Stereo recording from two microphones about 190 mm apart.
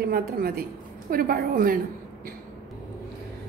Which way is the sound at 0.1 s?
50° right (ahead or behind).